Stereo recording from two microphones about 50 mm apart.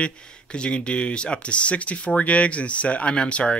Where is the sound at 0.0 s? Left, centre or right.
Left.